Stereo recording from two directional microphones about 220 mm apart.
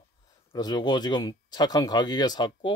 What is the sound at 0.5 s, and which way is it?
Speech, 20° left (ahead or behind).